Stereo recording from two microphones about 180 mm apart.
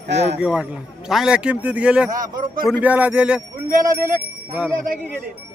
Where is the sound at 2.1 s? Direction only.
45° right (ahead or behind).